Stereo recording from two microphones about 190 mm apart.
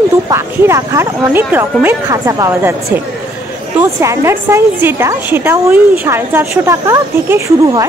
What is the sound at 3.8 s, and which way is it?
A woman's voice, 15° right (ahead or behind).